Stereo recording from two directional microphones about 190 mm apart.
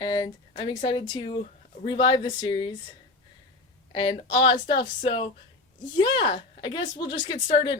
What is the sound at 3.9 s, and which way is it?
A woman's voice, 25° left (ahead or behind).